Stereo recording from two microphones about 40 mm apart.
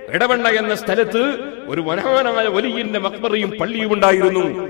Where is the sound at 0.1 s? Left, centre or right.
Centre.